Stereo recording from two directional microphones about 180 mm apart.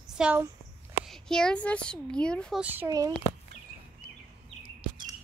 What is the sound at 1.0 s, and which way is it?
Speech, 5° left (ahead or behind).